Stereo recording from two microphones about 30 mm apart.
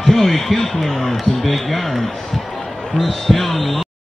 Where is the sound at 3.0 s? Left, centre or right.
Centre.